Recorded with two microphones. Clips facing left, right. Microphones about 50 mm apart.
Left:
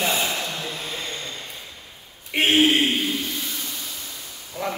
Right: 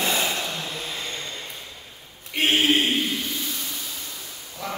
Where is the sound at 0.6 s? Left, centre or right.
Centre.